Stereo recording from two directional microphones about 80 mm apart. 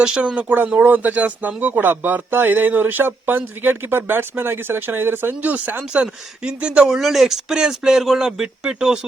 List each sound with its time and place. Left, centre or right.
0.0 s speech: centre